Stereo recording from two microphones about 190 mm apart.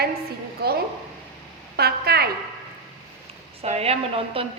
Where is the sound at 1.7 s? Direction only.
55° right (ahead or behind).